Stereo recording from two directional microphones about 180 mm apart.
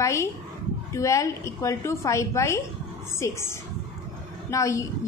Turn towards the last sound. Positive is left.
turn(degrees=15)  # may be behind; listen again after turning